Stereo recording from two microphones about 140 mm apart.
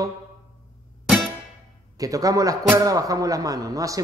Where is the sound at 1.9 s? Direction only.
25° right (ahead or behind).